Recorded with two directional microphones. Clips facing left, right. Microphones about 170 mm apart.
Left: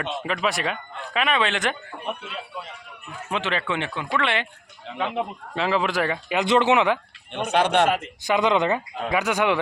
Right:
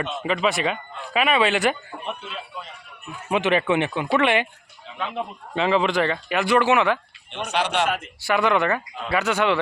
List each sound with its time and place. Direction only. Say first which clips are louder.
0.0 s speech: right 3 dB; centre (ahead or behind)
3.2 s speech: right 6 dB; 15° right (ahead or behind)
4.9 s speech: left 4 dB; 65° left (ahead or behind)
5.5 s speech: right 3 dB; centre (ahead or behind)
6.2 s speech: left 2 dB; 20° left (ahead or behind)
7.4 s speech: left 4 dB; 55° left (ahead or behind)
8.2 s speech: even; 20° left (ahead or behind)